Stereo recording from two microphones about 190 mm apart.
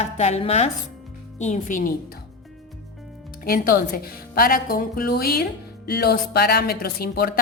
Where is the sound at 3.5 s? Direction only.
50° left (ahead or behind).